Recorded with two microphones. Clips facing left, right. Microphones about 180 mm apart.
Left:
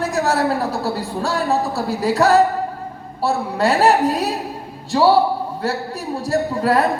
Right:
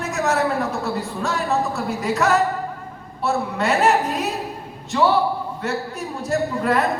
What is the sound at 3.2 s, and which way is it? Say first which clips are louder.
A man's voice: left 3 dB; 35° left (ahead or behind).